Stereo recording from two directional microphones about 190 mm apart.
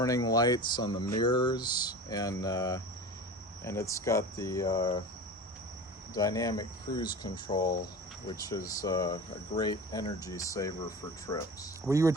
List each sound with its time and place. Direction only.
0.0 s speech: 20° left (ahead or behind)
6.1 s speech: 20° left (ahead or behind)
11.9 s speech: 15° right (ahead or behind)